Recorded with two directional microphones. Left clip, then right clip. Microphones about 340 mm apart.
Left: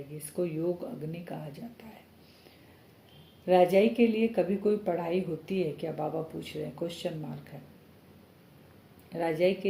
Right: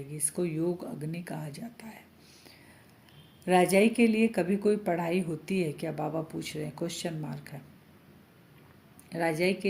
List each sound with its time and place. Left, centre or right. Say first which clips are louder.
0.3 s speech: even; right
3.4 s speech: left 1 dB; right
9.0 s speech: left 1 dB; right